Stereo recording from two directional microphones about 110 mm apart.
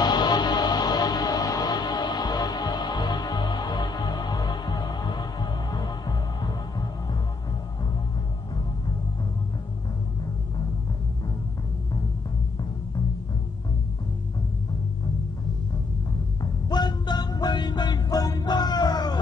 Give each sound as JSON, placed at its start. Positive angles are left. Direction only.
{"t": 0.0, "sound": "music", "side_deg": 40}
{"t": 16.6, "sound": "music", "side_deg": 40}